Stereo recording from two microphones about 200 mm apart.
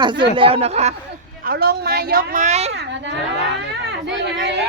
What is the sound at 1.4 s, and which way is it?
Speech, 50° right (ahead or behind).